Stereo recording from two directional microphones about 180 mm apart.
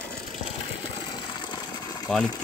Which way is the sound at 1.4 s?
25° left (ahead or behind).